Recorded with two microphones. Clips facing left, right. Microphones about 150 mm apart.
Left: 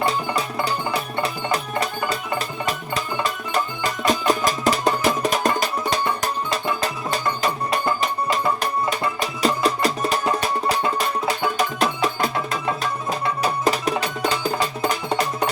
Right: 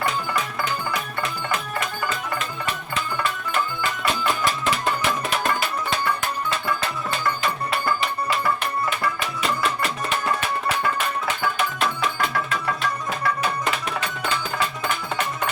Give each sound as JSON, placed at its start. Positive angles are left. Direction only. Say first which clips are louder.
{"t": 0.0, "sound": "music", "louder": "left 3 dB", "side_deg": 35}
{"t": 8.9, "sound": "music", "louder": "left 2 dB", "side_deg": 35}
{"t": 11.5, "sound": "music", "louder": "left 3 dB", "side_deg": 40}
{"t": 13.4, "sound": "music", "louder": "left 4 dB", "side_deg": 40}